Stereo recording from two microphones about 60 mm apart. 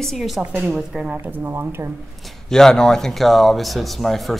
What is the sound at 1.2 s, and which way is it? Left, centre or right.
Speech, right.